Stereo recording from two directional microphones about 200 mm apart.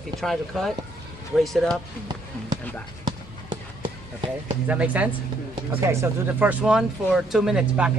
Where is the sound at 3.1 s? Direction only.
20° right (ahead or behind).